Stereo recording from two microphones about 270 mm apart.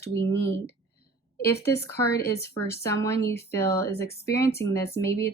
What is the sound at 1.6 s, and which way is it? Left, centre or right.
Speech, centre.